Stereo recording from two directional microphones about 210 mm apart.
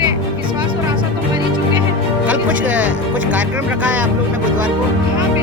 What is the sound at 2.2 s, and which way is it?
Music, 5° right (ahead or behind).